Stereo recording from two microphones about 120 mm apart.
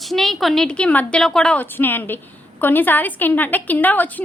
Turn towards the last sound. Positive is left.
turn(degrees=15)  # may be behind; listen again after turning